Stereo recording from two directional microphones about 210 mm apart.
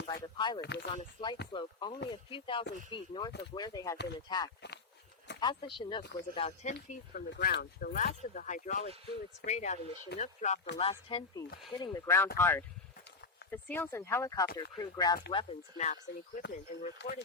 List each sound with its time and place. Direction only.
0.1 s a sound: 20° left (ahead or behind)
0.6 s speech: 55° left (ahead or behind)
0.9 s speech: 25° left (ahead or behind)
6.8 s speech: 40° left (ahead or behind); by 15.9 s 25° left (ahead or behind)
16.5 s speech: 40° left (ahead or behind)
17.0 s speech: 55° left (ahead or behind)